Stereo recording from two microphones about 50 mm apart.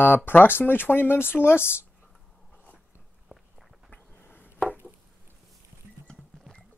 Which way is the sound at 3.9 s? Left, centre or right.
Left.